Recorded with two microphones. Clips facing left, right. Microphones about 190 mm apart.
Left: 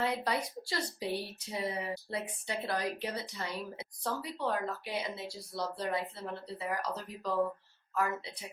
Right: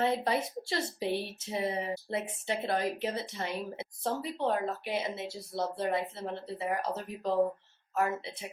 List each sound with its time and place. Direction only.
0.0 s speech: 25° right (ahead or behind)